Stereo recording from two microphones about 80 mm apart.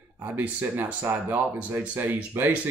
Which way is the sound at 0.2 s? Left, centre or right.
Right.